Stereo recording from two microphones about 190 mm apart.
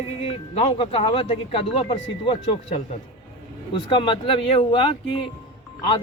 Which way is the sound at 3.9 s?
25° left (ahead or behind).